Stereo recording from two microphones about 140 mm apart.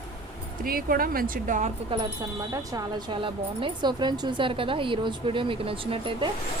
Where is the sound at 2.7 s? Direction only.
35° right (ahead or behind).